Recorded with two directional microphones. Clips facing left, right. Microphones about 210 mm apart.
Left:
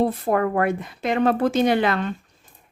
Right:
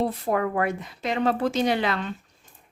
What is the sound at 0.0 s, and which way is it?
Speech, 50° left (ahead or behind).